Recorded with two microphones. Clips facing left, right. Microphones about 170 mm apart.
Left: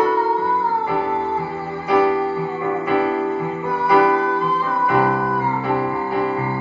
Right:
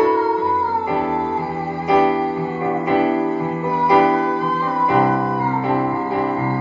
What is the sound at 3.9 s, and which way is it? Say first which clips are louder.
Music: even; 25° right (ahead or behind).